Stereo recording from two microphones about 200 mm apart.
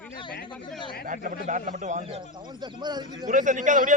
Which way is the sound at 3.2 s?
40° right (ahead or behind).